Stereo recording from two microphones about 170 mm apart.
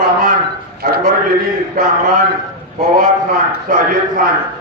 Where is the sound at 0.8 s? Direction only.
60° right (ahead or behind).